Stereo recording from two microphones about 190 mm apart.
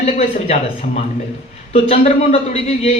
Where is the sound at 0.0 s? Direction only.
35° left (ahead or behind).